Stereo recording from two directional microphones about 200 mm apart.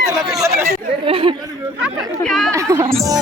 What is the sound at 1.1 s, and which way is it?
Chatter, 25° right (ahead or behind).